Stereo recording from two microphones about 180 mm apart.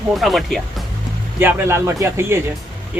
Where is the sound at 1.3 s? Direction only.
15° right (ahead or behind).